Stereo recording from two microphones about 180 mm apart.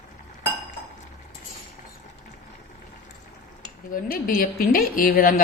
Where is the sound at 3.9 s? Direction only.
50° left (ahead or behind).